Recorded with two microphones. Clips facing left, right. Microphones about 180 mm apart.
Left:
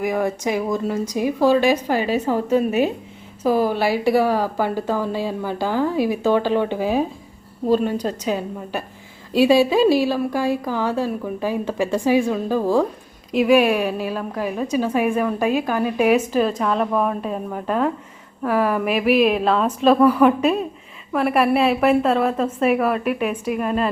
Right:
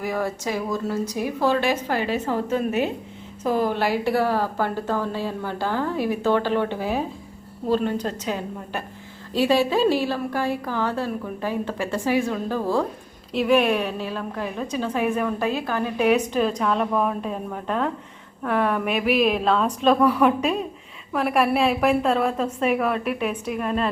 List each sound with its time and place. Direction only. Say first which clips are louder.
0.0 s a woman's voice: left 5 dB; 15° left (ahead or behind)